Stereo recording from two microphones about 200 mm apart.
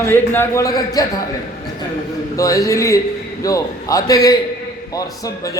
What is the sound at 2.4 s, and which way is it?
A man's voice, 15° left (ahead or behind).